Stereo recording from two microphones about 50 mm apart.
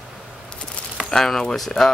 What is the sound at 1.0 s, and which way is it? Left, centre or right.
Speech, centre.